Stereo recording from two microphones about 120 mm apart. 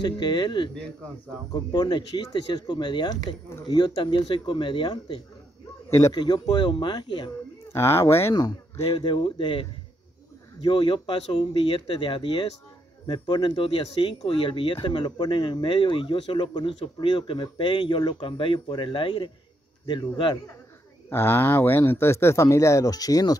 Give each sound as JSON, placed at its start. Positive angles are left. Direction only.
{"t": 0.0, "sound": "speech", "side_deg": 40}
{"t": 5.9, "sound": "speech", "side_deg": 25}
{"t": 6.1, "sound": "speech", "side_deg": 35}
{"t": 7.7, "sound": "speech", "side_deg": 20}
{"t": 8.4, "sound": "speech", "side_deg": 35}
{"t": 21.1, "sound": "speech", "side_deg": 20}